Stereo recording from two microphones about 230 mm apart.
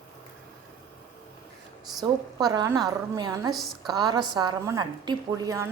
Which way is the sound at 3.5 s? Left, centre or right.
Centre.